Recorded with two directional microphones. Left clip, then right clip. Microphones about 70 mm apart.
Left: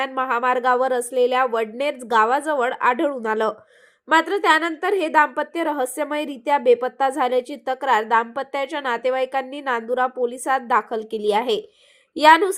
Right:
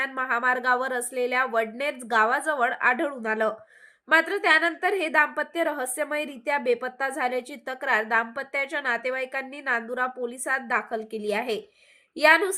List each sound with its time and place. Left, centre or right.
0.2 s a woman's voice: left